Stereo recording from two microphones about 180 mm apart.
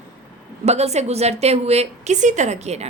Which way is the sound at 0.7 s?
35° right (ahead or behind).